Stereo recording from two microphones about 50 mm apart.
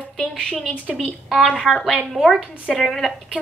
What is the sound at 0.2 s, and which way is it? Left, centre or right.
A woman's voice, centre.